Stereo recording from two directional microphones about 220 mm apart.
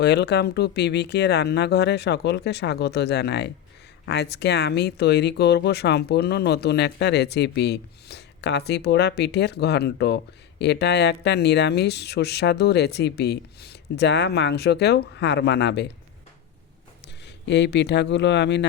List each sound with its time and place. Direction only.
0.0 s speech: 50° left (ahead or behind)
17.4 s speech: 50° left (ahead or behind)